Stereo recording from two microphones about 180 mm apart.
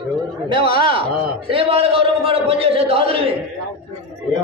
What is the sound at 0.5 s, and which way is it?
A man's voice, 30° right (ahead or behind).